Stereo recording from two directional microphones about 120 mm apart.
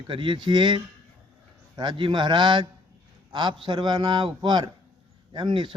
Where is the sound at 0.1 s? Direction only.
45° right (ahead or behind).